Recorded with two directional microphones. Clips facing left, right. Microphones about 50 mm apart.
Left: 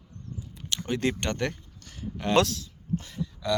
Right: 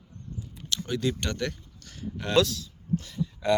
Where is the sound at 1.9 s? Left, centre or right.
Centre.